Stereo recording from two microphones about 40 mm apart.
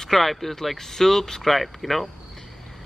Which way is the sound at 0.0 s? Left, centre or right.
Centre.